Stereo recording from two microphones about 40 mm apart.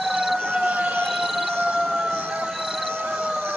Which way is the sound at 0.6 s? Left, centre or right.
Right.